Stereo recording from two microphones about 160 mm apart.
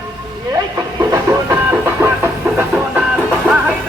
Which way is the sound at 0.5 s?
25° right (ahead or behind).